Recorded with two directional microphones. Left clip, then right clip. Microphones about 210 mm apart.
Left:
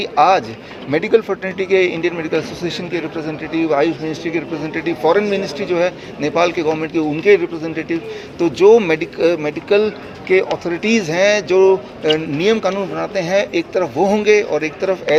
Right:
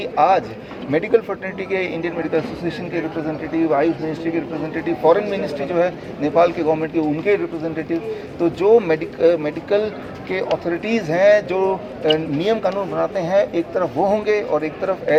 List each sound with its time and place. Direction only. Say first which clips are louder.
0.0 s speech: left 3 dB; 45° left (ahead or behind)